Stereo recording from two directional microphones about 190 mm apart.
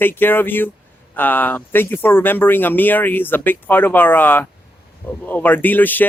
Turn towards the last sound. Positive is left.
turn(degrees=10)  # may be behind; listen again after turning